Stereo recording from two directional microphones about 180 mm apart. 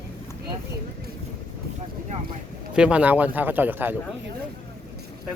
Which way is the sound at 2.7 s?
5° right (ahead or behind).